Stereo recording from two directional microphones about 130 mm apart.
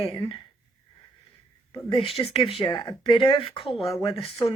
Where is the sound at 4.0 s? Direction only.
30° left (ahead or behind).